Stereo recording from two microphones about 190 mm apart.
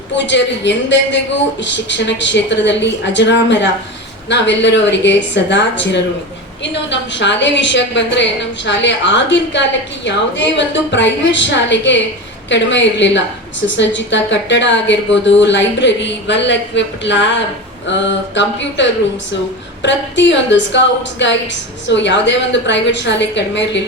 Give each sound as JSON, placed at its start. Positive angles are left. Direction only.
{"t": 0.3, "sound": "a woman's voice", "side_deg": 70}